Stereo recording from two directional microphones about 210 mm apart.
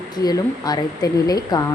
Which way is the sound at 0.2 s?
20° left (ahead or behind).